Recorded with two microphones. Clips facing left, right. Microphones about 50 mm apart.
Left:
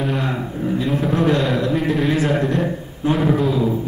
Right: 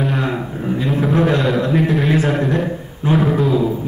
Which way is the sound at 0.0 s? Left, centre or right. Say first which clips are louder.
Right 2 dB; centre.